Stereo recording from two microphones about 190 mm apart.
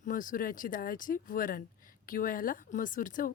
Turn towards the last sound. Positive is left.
turn(degrees=45)  # may be behind; listen again after turning